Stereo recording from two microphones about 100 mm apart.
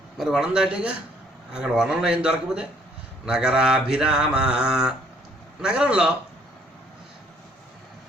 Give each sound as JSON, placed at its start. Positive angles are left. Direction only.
{"t": 0.2, "sound": "speech", "side_deg": -5}